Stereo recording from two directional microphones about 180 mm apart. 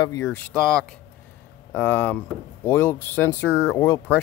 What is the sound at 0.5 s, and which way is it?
Speech, 5° left (ahead or behind).